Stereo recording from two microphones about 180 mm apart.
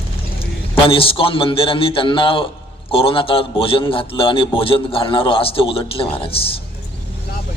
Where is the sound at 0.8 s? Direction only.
30° left (ahead or behind).